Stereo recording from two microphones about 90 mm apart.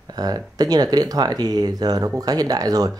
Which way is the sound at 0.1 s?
45° right (ahead or behind).